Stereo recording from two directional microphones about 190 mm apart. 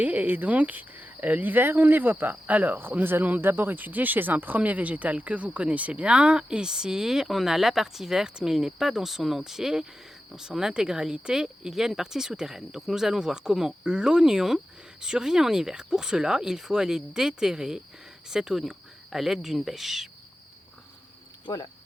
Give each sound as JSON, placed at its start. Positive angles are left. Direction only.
{"t": 0.0, "sound": "speech", "side_deg": -10}
{"t": 21.4, "sound": "speech", "side_deg": 20}